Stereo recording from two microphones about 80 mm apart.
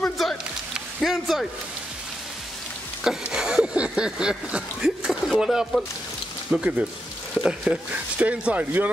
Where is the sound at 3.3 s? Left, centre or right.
Centre.